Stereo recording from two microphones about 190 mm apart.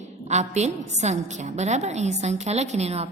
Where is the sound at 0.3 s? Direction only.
35° right (ahead or behind).